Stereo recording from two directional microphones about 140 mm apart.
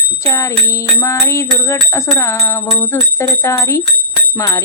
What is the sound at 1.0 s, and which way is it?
Jingle bell, 20° left (ahead or behind).